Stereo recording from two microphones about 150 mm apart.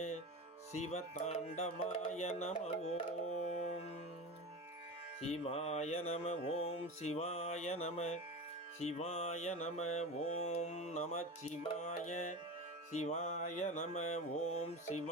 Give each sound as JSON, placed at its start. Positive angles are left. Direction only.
{"t": 0.7, "sound": "music", "side_deg": 50}
{"t": 5.2, "sound": "music", "side_deg": 45}